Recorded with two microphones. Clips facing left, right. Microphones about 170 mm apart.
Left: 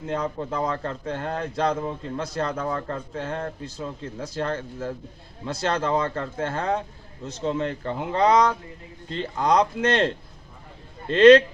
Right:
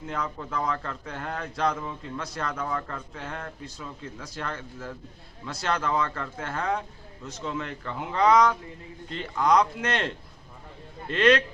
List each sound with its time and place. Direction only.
0.1 s a man's voice: 25° left (ahead or behind)
11.1 s a man's voice: 30° left (ahead or behind)